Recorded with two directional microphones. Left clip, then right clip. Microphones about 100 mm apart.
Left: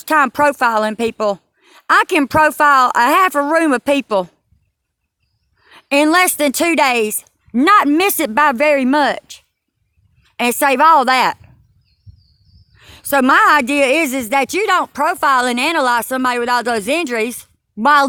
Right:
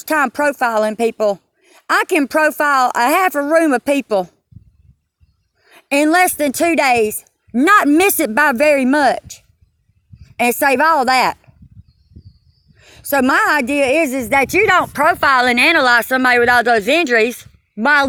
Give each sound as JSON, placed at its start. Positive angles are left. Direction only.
{"t": 0.0, "sound": "a woman's voice", "side_deg": 15}
{"t": 5.6, "sound": "a woman's voice", "side_deg": 15}
{"t": 7.6, "sound": "a woman's voice", "side_deg": 5}
{"t": 12.7, "sound": "a woman's voice", "side_deg": 20}
{"t": 14.3, "sound": "a woman's voice", "side_deg": 10}
{"t": 16.8, "sound": "a woman's voice", "side_deg": 10}
{"t": 17.8, "sound": "speech", "side_deg": 35}